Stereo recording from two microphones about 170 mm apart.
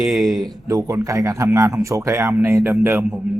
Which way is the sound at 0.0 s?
Centre (ahead or behind).